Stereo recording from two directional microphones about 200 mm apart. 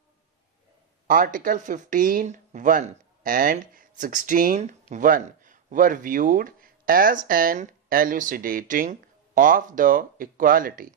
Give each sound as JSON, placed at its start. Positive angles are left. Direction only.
{"t": 1.0, "sound": "speech", "side_deg": -40}